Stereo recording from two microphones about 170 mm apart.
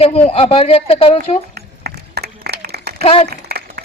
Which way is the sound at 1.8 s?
70° right (ahead or behind).